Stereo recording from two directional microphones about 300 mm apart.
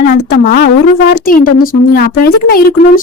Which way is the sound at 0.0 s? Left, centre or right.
Left.